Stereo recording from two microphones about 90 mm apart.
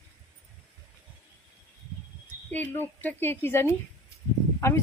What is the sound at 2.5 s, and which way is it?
A woman's voice, 20° left (ahead or behind).